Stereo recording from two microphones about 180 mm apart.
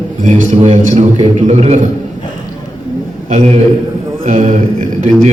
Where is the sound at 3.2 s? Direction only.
40° right (ahead or behind).